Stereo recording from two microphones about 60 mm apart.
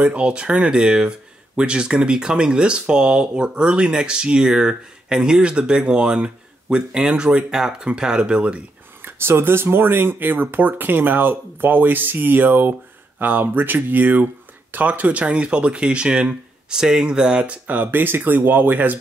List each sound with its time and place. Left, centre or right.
0.0 s speech: centre
9.0 s speech: right; by 17.6 s centre
17.6 s speech: right